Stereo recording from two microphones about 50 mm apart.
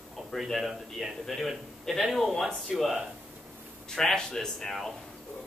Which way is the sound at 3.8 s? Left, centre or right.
Centre.